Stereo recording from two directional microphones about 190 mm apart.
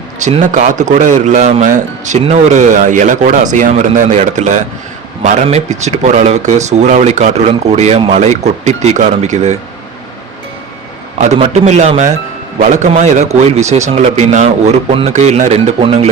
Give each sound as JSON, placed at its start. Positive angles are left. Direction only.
{"t": 0.2, "sound": "a man's voice", "side_deg": -40}
{"t": 11.2, "sound": "a man's voice", "side_deg": -35}